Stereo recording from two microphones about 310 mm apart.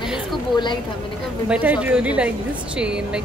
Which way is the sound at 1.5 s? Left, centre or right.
Centre.